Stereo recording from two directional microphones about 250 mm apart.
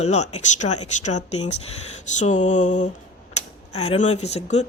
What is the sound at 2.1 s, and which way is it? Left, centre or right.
Speech, left.